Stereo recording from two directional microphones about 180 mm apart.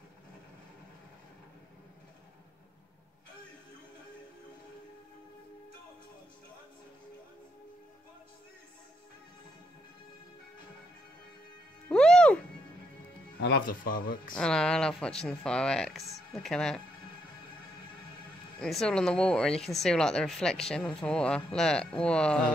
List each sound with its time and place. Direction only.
11.9 s music: 5° left (ahead or behind)
13.4 s a man's voice: 60° left (ahead or behind)
14.3 s speech: 5° left (ahead or behind)
18.6 s speech: 5° left (ahead or behind)